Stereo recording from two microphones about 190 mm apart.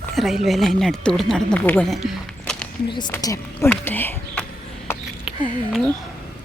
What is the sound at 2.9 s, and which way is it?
A woman's voice, 25° left (ahead or behind).